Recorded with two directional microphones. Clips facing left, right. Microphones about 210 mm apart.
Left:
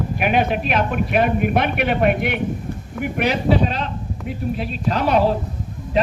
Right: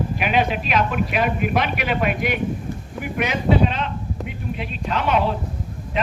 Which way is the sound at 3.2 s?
35° left (ahead or behind).